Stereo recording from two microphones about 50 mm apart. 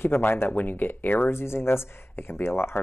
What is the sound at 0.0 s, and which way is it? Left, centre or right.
Speech, left.